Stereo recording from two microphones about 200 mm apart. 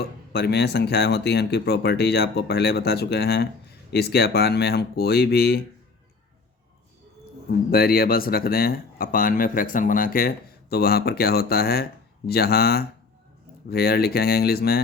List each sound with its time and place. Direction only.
0.3 s speech: 55° left (ahead or behind)
7.7 s speech: 50° left (ahead or behind)